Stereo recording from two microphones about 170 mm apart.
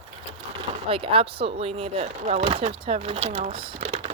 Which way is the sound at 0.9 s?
30° right (ahead or behind).